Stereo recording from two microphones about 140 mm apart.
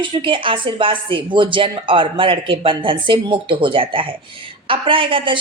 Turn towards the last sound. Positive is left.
turn(degrees=-35)  # may be behind; listen again after turning